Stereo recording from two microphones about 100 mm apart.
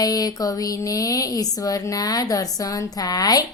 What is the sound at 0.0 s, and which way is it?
Speech, 40° left (ahead or behind).